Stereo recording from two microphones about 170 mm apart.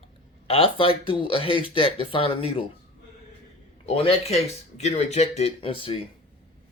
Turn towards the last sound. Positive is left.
turn(degrees=30)  # may be behind; listen again after turning